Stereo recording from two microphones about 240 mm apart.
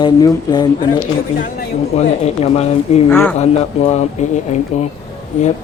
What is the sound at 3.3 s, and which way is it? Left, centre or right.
Speech, left.